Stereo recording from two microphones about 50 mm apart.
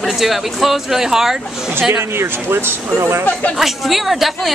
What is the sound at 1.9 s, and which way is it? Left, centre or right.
Speech, right.